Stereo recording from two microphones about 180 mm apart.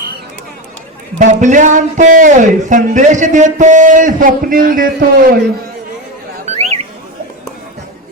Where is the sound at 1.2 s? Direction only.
40° right (ahead or behind).